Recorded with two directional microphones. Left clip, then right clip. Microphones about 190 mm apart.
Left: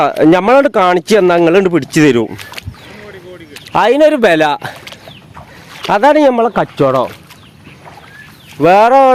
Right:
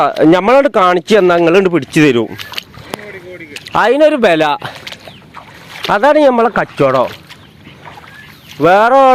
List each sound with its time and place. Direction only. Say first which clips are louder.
0.2 s speech: even; 15° left (ahead or behind)
2.4 s speech: right 4 dB; 50° right (ahead or behind)
3.8 s speech: left 1 dB; 20° left (ahead or behind)
5.9 s speech: even; 15° left (ahead or behind)
8.5 s speech: left 1 dB; 15° left (ahead or behind)